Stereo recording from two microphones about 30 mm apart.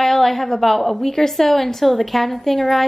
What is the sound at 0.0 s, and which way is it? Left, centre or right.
A woman's voice, centre.